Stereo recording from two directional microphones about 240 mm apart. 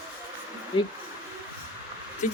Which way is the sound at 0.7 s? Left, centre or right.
Centre.